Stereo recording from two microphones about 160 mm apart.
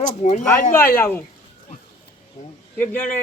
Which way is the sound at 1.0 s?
15° left (ahead or behind).